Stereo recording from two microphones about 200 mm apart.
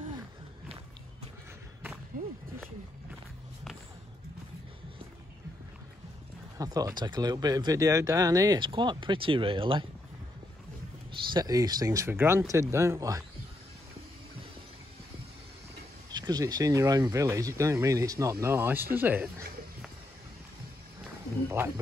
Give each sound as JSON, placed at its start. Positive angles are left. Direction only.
{"t": 2.1, "sound": "a sound", "side_deg": -45}
{"t": 6.6, "sound": "speech", "side_deg": -20}
{"t": 11.3, "sound": "speech", "side_deg": -20}
{"t": 16.1, "sound": "speech", "side_deg": -20}